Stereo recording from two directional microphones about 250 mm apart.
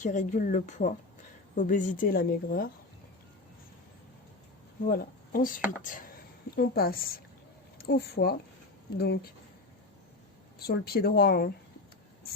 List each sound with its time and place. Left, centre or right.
0.0 s speech: left
4.9 s speech: left
10.6 s speech: left